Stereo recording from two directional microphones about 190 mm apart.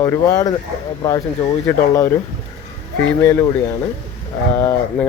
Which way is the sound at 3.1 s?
10° left (ahead or behind).